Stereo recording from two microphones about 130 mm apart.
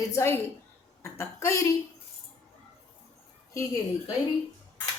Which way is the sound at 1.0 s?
20° left (ahead or behind).